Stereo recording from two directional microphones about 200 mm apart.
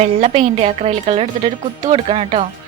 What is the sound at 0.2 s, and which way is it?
A woman's voice, 30° right (ahead or behind).